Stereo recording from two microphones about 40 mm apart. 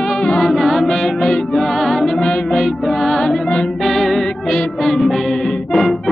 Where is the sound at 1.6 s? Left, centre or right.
Centre.